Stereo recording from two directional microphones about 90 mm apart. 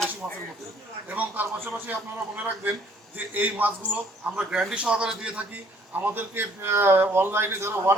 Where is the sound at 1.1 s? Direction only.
20° right (ahead or behind).